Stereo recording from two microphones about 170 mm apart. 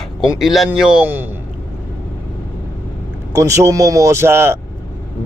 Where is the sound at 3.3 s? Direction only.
20° right (ahead or behind).